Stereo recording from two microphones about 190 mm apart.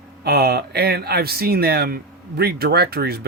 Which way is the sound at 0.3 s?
55° right (ahead or behind).